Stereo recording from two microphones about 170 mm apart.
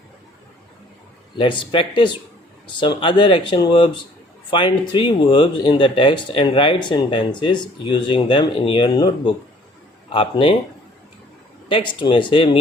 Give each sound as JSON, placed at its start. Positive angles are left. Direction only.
{"t": 1.4, "sound": "speech", "side_deg": 30}
{"t": 11.7, "sound": "speech", "side_deg": 30}